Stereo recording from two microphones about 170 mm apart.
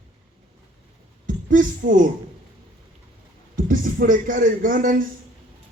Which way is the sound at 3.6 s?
50° right (ahead or behind).